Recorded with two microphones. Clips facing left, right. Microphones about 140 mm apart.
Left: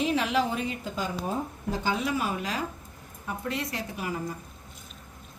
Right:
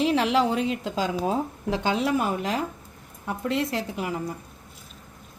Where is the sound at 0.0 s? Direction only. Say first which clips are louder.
Right 4 dB; 90° right; by 2.6 s 60° right (ahead or behind).